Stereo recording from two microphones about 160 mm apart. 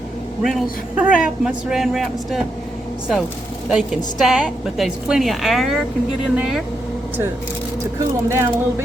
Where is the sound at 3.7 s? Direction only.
5° right (ahead or behind).